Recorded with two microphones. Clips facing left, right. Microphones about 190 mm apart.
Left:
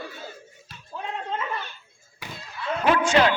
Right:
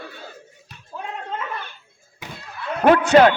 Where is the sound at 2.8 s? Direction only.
55° right (ahead or behind).